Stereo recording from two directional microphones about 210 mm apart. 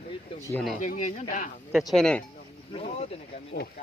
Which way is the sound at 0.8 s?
35° left (ahead or behind).